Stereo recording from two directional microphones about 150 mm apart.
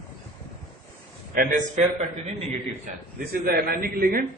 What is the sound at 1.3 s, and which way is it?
Speech, 70° right (ahead or behind).